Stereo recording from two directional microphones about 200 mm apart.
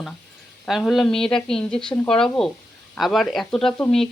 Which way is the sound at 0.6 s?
Centre (ahead or behind).